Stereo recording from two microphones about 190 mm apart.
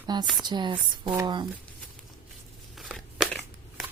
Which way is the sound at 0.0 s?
20° right (ahead or behind).